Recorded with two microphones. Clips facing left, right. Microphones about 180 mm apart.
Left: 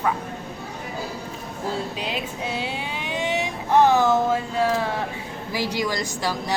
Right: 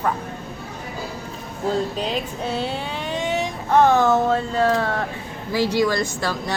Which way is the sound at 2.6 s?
10° left (ahead or behind).